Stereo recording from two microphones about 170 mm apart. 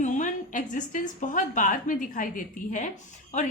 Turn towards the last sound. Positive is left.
turn(degrees=45)  # may be behind; listen again after turning